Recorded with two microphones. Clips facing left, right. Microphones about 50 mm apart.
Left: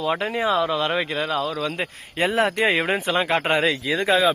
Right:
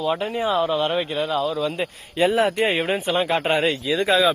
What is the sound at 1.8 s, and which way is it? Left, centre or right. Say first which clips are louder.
Speech: right 4 dB; left.